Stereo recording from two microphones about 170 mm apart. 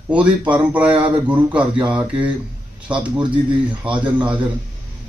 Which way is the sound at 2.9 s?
30° right (ahead or behind).